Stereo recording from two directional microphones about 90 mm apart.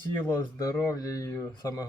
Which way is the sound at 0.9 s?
40° left (ahead or behind).